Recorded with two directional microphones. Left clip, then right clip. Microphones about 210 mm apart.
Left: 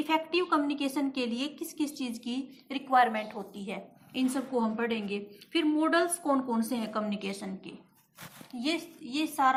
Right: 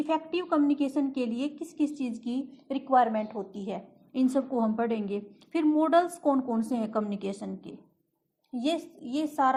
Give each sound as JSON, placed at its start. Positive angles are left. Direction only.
{"t": 0.1, "sound": "a woman's voice", "side_deg": -40}